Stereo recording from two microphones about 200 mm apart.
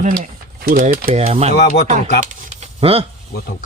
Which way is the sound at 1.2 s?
30° right (ahead or behind).